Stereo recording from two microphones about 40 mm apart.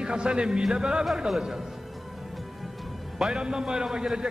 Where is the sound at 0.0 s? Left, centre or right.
Right.